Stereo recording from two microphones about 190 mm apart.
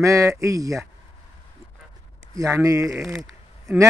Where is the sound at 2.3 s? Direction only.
15° right (ahead or behind).